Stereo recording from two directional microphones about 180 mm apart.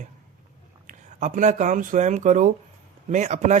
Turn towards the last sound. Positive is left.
turn(degrees=-40)  # may be behind; listen again after turning